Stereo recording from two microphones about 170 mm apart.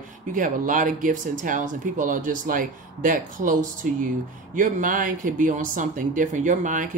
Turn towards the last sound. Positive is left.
turn(degrees=-50)  # may be behind; listen again after turning